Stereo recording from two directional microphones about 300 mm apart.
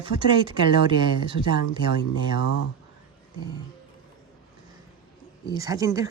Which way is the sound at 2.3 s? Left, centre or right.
Left.